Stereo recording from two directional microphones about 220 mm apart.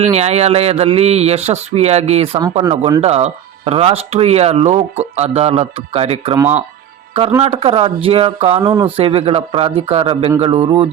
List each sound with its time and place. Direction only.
0.1 s speech: 30° right (ahead or behind)
6.3 s speech: 10° right (ahead or behind)
7.4 s speech: 30° right (ahead or behind)